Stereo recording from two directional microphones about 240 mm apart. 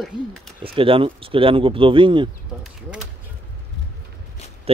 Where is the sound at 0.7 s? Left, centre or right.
Right.